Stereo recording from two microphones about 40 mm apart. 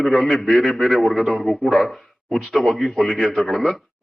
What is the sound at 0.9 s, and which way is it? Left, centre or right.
Speech, centre.